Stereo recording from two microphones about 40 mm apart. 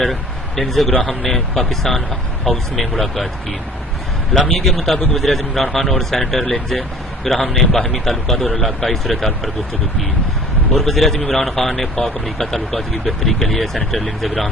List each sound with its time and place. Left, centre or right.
0.0 s a man's voice: centre
4.6 s a man's voice: centre
10.8 s speech: centre